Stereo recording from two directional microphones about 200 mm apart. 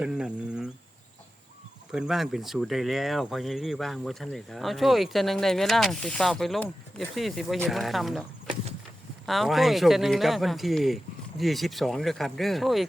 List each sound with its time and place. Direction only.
0.0 s speech: 5° right (ahead or behind)
1.9 s speech: centre (ahead or behind)